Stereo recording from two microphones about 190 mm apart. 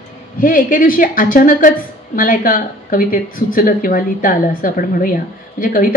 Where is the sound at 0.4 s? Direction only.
45° left (ahead or behind).